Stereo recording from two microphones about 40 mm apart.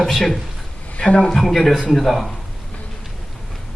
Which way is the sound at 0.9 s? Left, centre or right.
Left.